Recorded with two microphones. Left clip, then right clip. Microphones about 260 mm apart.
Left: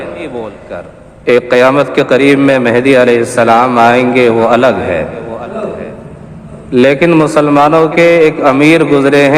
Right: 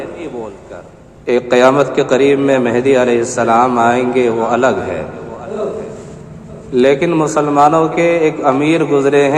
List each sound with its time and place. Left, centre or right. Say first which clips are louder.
1.2 s a man's voice: left 3 dB; left
6.7 s a man's voice: left 4 dB; left